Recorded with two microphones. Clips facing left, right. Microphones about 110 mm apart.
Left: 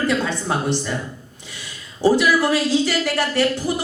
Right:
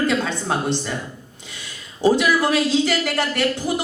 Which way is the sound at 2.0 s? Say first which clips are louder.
Left 1 dB; 20° right (ahead or behind).